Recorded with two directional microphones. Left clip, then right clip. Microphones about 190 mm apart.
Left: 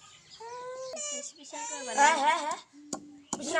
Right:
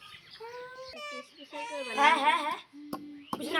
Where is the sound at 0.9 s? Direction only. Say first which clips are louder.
Left 3 dB; 35° left (ahead or behind).